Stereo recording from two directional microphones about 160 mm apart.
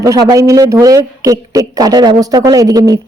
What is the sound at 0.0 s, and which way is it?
A man's voice, 20° right (ahead or behind).